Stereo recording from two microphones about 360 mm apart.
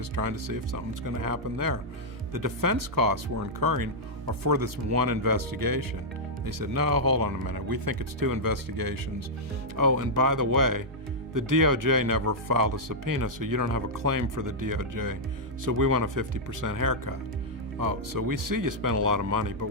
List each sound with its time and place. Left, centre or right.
0.2 s speech: right
9.7 s speech: right